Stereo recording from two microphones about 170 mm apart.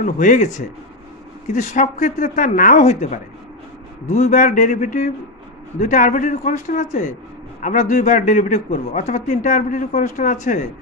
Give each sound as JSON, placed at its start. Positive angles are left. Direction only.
{"t": 0.0, "sound": "a man's voice", "side_deg": 45}